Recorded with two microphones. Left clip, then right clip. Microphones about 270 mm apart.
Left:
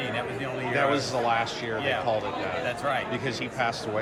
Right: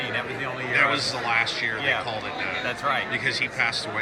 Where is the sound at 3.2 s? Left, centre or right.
Centre.